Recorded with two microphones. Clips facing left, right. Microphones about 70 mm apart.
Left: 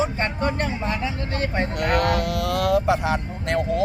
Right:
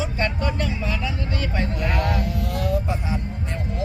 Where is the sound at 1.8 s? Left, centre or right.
Left.